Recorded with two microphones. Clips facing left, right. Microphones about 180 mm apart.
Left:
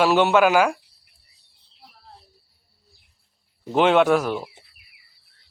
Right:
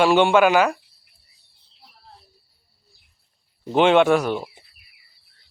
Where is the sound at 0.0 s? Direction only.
5° left (ahead or behind).